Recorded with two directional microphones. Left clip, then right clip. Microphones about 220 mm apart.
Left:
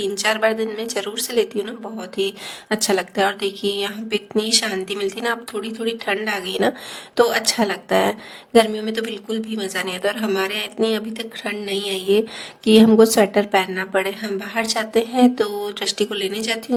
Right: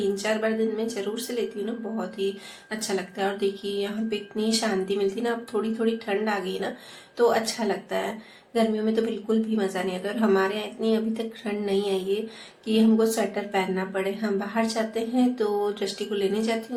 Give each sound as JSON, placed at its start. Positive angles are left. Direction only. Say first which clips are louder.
{"t": 0.1, "sound": "a woman's voice", "louder": "left 7 dB", "side_deg": 50}